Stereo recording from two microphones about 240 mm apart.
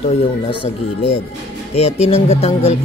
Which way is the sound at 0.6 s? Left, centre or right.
Left.